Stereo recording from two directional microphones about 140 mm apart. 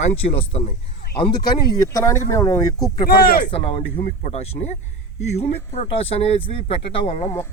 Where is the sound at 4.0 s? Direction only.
60° left (ahead or behind).